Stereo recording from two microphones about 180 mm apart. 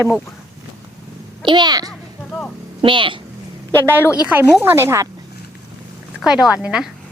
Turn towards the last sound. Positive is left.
turn(degrees=-5)  # may be behind; listen again after turning